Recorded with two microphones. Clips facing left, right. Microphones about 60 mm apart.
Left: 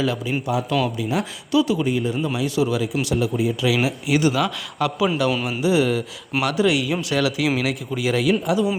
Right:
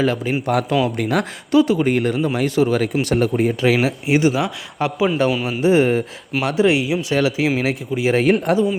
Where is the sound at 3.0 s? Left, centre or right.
Right.